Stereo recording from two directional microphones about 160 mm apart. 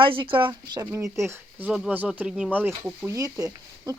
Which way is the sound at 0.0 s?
35° right (ahead or behind).